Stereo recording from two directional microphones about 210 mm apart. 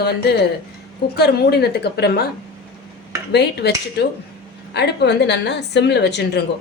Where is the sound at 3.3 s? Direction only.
50° left (ahead or behind).